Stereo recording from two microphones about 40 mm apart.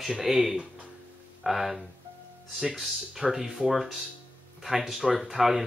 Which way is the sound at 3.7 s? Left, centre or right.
Centre.